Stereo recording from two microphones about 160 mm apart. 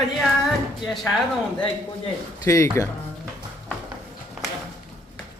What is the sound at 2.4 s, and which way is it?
Speech, 20° left (ahead or behind).